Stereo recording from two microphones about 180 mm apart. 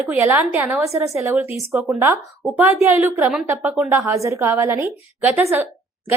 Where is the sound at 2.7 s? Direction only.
15° right (ahead or behind).